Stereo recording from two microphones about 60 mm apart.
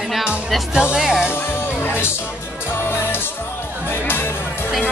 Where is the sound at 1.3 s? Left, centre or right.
Left.